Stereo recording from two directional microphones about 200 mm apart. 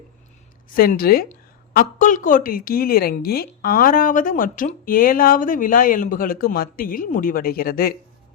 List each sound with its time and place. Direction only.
0.7 s a woman's voice: 45° left (ahead or behind)